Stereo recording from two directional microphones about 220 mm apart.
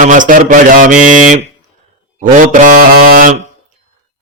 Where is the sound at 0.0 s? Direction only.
35° right (ahead or behind).